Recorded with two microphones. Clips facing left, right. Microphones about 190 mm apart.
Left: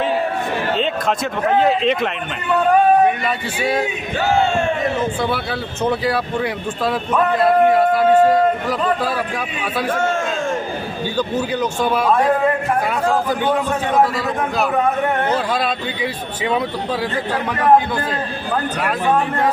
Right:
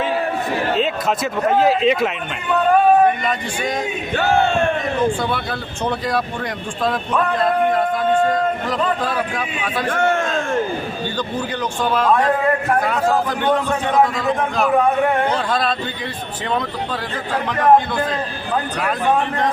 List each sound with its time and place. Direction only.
0.8 s speech: 5° right (ahead or behind)
3.2 s speech: 5° left (ahead or behind)
4.2 s a man's voice: 60° right (ahead or behind)
5.3 s a man's voice: 5° left (ahead or behind)
9.9 s a man's voice: 60° right (ahead or behind)
11.2 s a man's voice: 10° left (ahead or behind)
13.4 s a man's voice: 10° left (ahead or behind)